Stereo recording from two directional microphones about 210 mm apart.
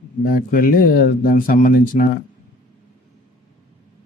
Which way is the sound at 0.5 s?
45° left (ahead or behind).